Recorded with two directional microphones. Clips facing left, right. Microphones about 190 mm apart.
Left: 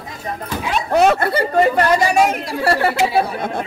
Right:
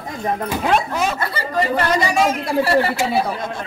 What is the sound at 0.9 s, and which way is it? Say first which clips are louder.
Speech: left 8 dB; 65° left (ahead or behind).